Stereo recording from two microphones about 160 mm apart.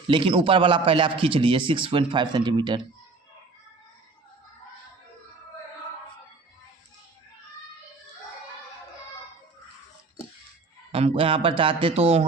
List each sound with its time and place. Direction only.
0.1 s a man's voice: 35° right (ahead or behind)
10.9 s a man's voice: 35° right (ahead or behind)